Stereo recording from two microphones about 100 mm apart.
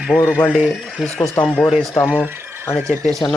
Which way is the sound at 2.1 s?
20° left (ahead or behind).